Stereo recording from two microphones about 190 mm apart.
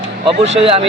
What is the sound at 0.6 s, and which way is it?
Speech, 30° right (ahead or behind).